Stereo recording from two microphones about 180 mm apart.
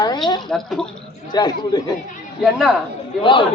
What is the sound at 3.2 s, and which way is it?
Speech, 30° left (ahead or behind).